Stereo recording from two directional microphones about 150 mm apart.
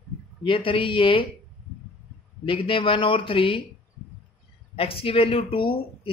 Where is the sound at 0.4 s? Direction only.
35° left (ahead or behind).